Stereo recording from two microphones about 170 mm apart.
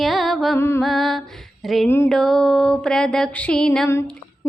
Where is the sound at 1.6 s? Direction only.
Centre (ahead or behind).